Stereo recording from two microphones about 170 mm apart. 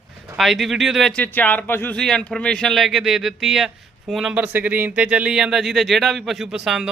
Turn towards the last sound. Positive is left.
turn(degrees=0)  # may be behind; listen again after turning